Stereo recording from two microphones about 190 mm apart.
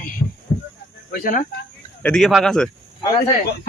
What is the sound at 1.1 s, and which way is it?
Speech, 45° left (ahead or behind).